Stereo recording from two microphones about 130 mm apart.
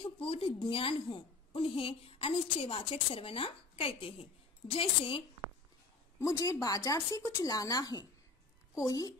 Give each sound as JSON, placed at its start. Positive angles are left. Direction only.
{"t": 0.0, "sound": "a woman's voice", "side_deg": 45}
{"t": 6.1, "sound": "speech", "side_deg": 25}